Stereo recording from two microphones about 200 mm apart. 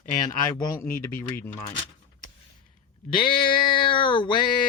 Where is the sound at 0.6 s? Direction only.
15° left (ahead or behind).